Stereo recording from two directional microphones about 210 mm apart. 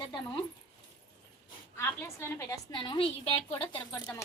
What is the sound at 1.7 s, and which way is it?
A woman's voice, 10° left (ahead or behind).